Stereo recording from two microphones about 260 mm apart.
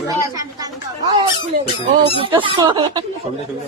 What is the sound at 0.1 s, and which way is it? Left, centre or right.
Speech, centre.